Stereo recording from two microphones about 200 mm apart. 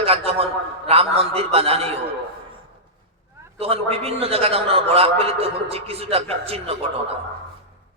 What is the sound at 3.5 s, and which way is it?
A man's voice, 30° right (ahead or behind).